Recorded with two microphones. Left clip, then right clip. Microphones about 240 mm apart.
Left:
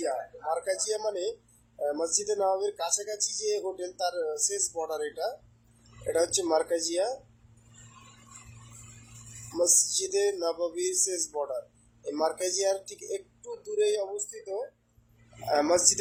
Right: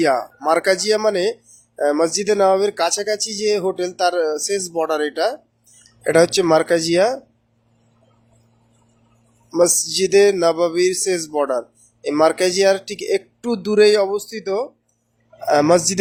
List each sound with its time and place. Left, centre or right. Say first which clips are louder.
0.0 s speech: right 14 dB; right
9.5 s speech: right 10 dB; right
15.4 s speech: right 10 dB; right